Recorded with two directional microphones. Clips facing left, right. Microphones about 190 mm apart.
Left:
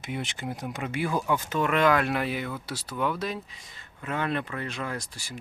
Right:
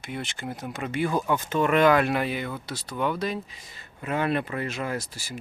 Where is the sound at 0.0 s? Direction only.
15° left (ahead or behind).